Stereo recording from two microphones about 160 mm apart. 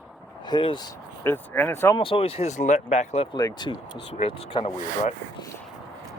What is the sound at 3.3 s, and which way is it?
Speech, 25° left (ahead or behind).